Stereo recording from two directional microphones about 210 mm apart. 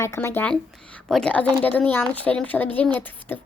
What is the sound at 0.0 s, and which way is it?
A woman's voice, 10° left (ahead or behind).